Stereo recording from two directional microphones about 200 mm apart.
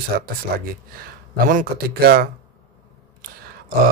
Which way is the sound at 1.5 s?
45° right (ahead or behind).